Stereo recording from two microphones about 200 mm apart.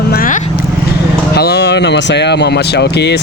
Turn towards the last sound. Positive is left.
turn(degrees=55)  # may be behind; listen again after turning